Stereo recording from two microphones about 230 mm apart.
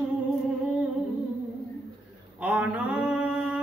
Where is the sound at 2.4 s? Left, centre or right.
Centre.